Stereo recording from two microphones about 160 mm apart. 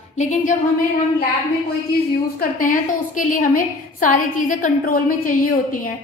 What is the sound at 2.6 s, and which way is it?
A woman's voice, 55° left (ahead or behind).